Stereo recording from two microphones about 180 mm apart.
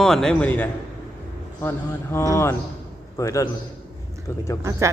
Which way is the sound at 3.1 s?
20° left (ahead or behind).